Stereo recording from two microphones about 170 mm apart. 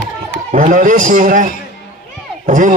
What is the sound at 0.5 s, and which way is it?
A man's voice, 50° right (ahead or behind).